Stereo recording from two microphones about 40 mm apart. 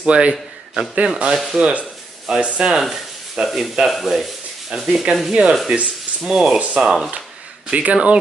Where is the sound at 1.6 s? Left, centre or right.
Right.